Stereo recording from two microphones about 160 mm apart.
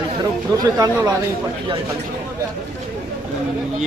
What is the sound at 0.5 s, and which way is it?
Speech, 20° right (ahead or behind).